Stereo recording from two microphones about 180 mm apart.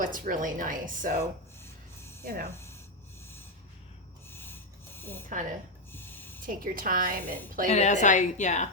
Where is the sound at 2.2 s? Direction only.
55° right (ahead or behind).